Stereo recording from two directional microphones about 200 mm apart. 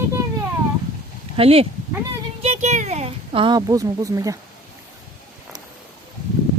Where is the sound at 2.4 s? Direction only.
35° right (ahead or behind); by 4.4 s 15° right (ahead or behind).